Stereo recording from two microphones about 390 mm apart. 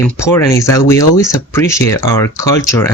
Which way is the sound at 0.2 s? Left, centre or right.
Centre.